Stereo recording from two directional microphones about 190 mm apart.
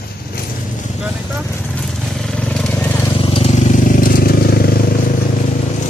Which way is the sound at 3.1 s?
30° left (ahead or behind).